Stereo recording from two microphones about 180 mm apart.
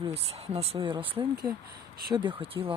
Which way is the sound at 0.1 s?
35° right (ahead or behind).